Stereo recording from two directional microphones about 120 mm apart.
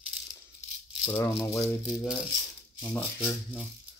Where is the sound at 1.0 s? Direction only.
20° left (ahead or behind).